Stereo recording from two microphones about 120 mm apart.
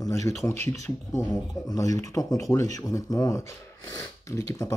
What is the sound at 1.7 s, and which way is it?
Speech, 30° left (ahead or behind).